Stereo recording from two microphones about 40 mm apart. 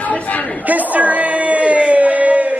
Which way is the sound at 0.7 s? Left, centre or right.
Right.